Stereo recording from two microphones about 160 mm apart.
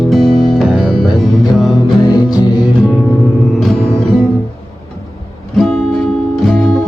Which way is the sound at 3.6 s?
Centre (ahead or behind).